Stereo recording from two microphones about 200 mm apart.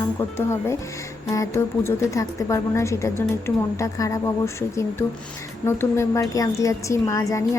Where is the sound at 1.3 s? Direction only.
15° left (ahead or behind).